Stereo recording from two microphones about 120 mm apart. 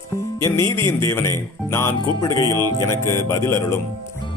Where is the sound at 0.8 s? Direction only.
20° left (ahead or behind).